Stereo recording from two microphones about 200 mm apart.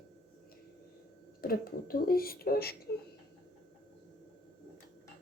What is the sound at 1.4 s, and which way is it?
Speech, 50° left (ahead or behind).